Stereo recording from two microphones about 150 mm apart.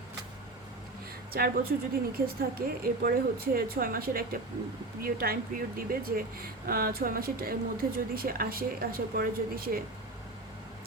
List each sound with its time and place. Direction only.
1.3 s speech: 85° right